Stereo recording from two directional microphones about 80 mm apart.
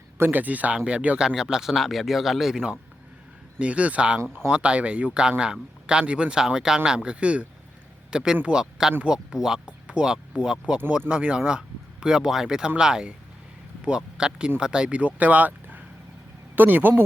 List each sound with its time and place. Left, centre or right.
0.2 s speech: right